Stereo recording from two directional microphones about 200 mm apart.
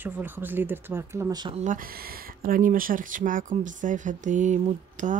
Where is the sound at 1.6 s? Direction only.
45° right (ahead or behind).